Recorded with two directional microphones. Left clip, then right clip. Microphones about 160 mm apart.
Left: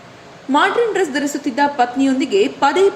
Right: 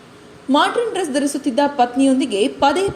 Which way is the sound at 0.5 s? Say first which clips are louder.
Left 2 dB; 35° right (ahead or behind).